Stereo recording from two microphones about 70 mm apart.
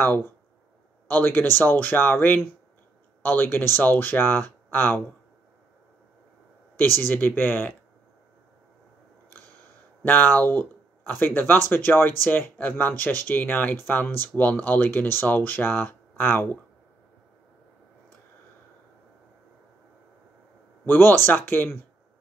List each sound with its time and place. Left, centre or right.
0.0 s speech: left
7.0 s speech: left
10.0 s speech: left
20.8 s speech: left